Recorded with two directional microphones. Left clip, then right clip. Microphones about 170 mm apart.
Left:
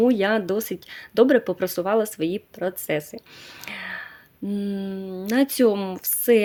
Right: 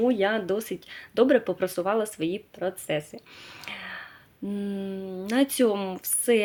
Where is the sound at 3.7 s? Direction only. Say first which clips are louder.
Left 5 dB; 30° left (ahead or behind).